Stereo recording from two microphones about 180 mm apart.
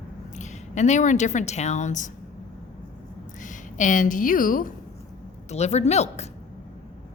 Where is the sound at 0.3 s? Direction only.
40° left (ahead or behind).